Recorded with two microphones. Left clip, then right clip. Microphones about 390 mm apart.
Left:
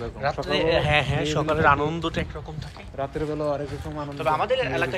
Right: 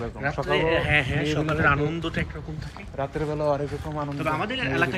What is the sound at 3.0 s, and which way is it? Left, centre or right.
Speech, centre.